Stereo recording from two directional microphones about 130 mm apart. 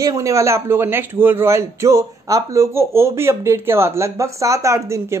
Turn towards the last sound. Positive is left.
turn(degrees=-25)  # may be behind; listen again after turning